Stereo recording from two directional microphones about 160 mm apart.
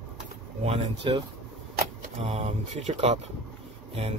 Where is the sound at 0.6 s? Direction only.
35° right (ahead or behind).